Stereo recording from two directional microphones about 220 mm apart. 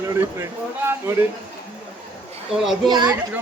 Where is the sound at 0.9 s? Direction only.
10° right (ahead or behind).